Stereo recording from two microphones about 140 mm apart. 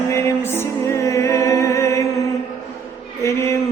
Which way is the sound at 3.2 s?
20° left (ahead or behind).